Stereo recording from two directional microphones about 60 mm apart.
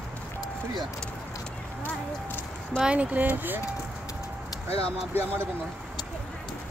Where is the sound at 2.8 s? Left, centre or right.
Centre.